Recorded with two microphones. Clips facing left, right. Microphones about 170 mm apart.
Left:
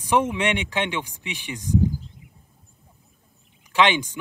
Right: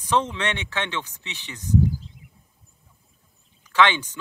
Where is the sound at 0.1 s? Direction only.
10° left (ahead or behind).